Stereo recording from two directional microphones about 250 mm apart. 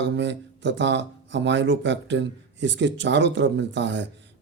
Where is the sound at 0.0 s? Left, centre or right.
Right.